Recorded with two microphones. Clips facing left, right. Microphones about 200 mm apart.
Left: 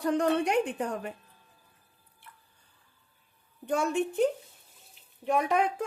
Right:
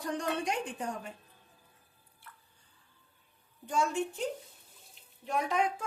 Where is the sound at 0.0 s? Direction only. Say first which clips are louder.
Left 8 dB; 60° left (ahead or behind).